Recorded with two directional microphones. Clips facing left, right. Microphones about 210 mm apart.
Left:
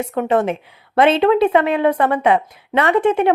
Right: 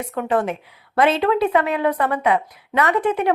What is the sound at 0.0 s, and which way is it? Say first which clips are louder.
Speech: left 4 dB; 25° left (ahead or behind).